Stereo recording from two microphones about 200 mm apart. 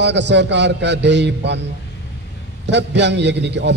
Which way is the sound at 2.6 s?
60° right (ahead or behind).